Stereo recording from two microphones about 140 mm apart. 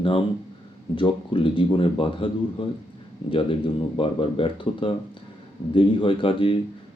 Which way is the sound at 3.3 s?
40° left (ahead or behind).